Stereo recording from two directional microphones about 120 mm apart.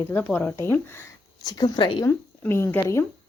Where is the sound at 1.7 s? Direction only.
40° left (ahead or behind).